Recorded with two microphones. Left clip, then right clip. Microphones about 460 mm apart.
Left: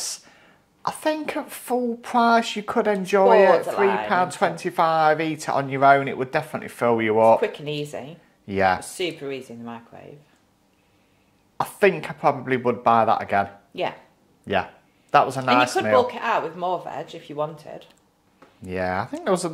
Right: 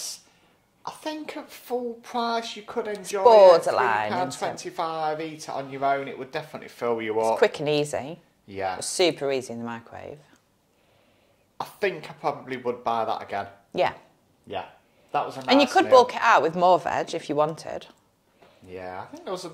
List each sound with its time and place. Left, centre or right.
0.8 s speech: left
3.3 s speech: right
4.1 s speech: left
7.3 s speech: right
8.5 s speech: left
8.9 s speech: right
11.5 s speech: left
15.0 s speech: left
15.4 s speech: right
18.7 s speech: left